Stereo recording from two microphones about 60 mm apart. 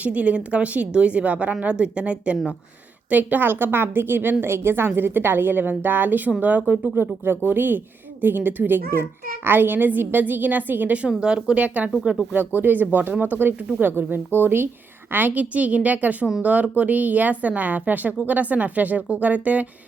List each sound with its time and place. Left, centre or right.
0.0 s a woman's voice: right